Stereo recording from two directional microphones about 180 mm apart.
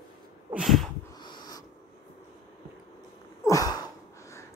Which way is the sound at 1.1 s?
25° left (ahead or behind).